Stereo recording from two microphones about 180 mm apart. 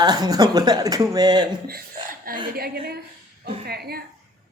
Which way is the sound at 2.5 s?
60° right (ahead or behind).